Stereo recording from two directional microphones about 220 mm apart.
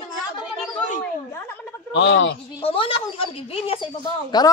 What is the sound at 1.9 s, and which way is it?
Speech, 55° left (ahead or behind).